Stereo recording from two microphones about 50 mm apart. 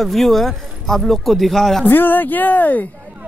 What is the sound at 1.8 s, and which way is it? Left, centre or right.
Speech, left.